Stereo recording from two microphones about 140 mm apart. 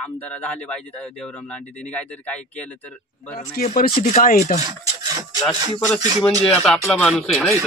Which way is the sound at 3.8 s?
70° left (ahead or behind).